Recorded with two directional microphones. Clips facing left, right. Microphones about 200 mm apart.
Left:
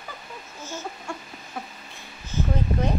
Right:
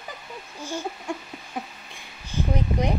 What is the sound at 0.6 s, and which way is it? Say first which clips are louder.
Speech: right 4 dB; 15° right (ahead or behind).